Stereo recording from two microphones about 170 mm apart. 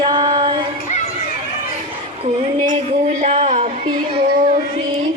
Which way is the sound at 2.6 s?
45° right (ahead or behind).